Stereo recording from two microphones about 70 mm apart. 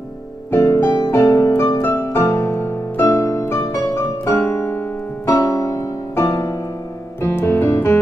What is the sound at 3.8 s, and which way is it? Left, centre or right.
Piano, left.